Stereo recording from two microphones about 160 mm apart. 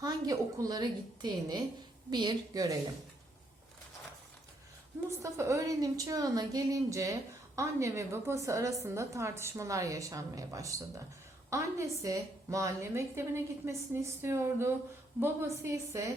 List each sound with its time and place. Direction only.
0.0 s a woman's voice: 25° right (ahead or behind)
5.2 s a woman's voice: 20° right (ahead or behind)